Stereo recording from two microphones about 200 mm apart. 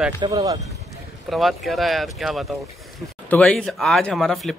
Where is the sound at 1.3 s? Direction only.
Centre (ahead or behind).